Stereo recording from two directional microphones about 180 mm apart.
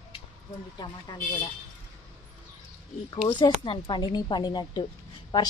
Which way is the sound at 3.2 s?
25° left (ahead or behind).